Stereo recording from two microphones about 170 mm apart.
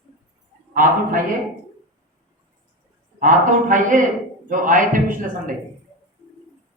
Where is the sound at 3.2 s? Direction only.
50° right (ahead or behind).